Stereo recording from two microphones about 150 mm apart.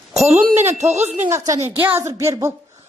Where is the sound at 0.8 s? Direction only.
45° right (ahead or behind).